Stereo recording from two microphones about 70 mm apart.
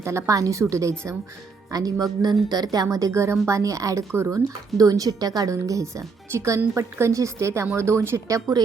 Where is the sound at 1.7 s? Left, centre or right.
Right.